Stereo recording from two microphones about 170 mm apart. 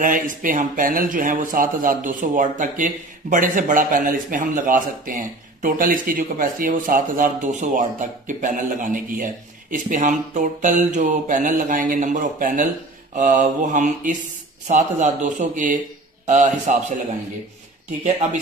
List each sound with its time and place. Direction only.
0.0 s speech: 50° right (ahead or behind)